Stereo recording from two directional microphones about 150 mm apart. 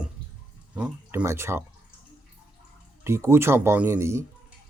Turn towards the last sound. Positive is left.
turn(degrees=-20)  # may be behind; listen again after turning